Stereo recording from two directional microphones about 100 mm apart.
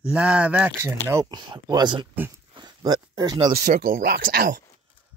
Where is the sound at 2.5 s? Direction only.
45° right (ahead or behind).